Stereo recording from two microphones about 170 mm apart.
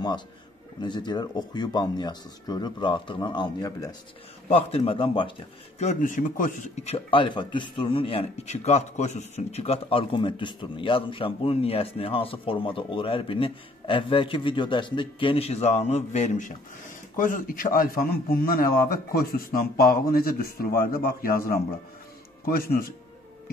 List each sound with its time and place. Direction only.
0.8 s speech: 25° left (ahead or behind)
4.5 s speech: 35° left (ahead or behind)
5.8 s a man's voice: 45° left (ahead or behind)